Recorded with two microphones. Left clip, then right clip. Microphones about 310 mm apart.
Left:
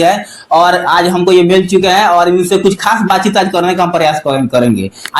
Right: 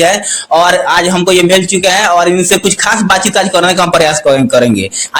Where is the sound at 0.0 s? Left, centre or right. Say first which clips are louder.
Right 1 dB; right.